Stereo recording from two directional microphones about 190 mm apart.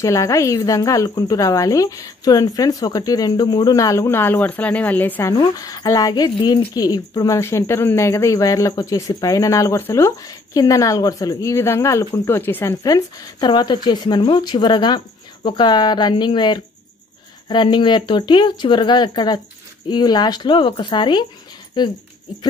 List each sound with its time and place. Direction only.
0.0 s speech: 15° left (ahead or behind)
5.3 s speech: 20° left (ahead or behind)